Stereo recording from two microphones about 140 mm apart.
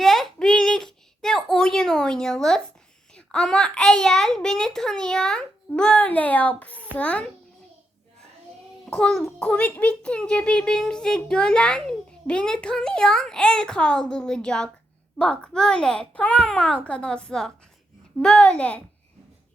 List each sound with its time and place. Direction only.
0.0 s a sound: centre (ahead or behind)
3.2 s a child's voice: 5° left (ahead or behind)
8.9 s a child's voice: 5° left (ahead or behind)